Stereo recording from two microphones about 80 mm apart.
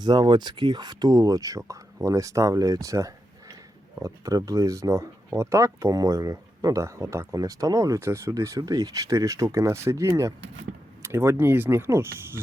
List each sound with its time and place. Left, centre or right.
0.0 s speech: right